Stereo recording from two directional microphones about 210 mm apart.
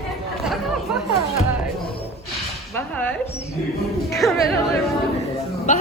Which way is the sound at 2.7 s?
10° left (ahead or behind).